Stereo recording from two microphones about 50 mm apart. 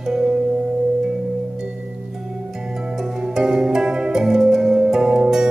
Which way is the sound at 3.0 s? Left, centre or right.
Centre.